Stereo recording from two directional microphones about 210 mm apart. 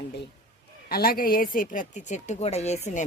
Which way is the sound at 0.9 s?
45° left (ahead or behind).